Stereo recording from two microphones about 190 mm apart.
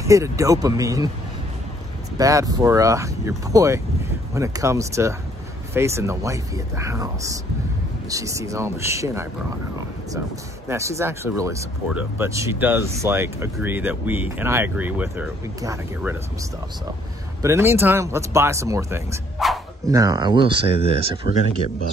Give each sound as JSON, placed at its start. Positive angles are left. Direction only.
{"t": 0.0, "sound": "speech", "side_deg": -15}
{"t": 2.1, "sound": "speech", "side_deg": -20}
{"t": 10.7, "sound": "speech", "side_deg": -15}
{"t": 17.4, "sound": "speech", "side_deg": -15}
{"t": 19.3, "sound": "dog", "side_deg": 0}
{"t": 19.9, "sound": "speech", "side_deg": -20}